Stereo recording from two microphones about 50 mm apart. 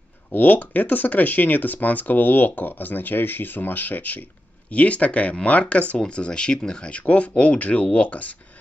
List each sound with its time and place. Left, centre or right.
0.3 s speech: left